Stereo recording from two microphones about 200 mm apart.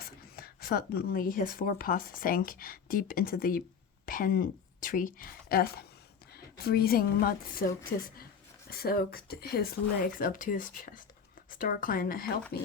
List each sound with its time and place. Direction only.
0.0 s a woman's voice: 50° left (ahead or behind)